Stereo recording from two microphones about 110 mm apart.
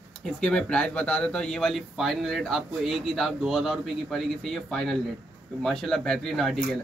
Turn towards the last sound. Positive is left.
turn(degrees=5)  # may be behind; listen again after turning